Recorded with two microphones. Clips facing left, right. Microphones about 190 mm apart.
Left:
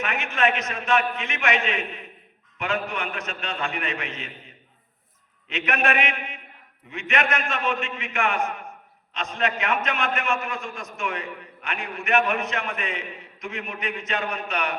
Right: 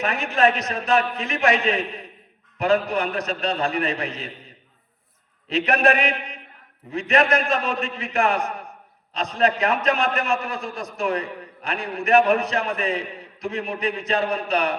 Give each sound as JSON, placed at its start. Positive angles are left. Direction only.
{"t": 0.0, "sound": "a man's voice", "side_deg": -35}